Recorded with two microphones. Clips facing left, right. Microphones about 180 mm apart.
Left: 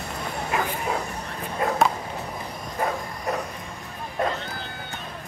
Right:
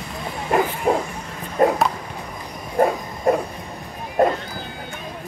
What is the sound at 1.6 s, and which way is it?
Dog, 45° right (ahead or behind).